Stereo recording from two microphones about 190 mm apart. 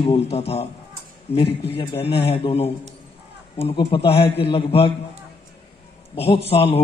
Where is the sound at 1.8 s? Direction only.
30° left (ahead or behind).